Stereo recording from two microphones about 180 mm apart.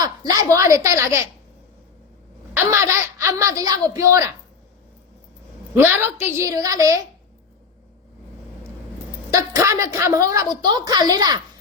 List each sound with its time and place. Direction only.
0.0 s a woman's voice: 20° right (ahead or behind)
2.6 s a woman's voice: 15° right (ahead or behind)
5.7 s a woman's voice: 15° right (ahead or behind)
9.3 s a woman's voice: 15° right (ahead or behind)